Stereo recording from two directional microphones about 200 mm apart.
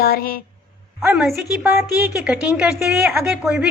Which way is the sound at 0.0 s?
45° left (ahead or behind).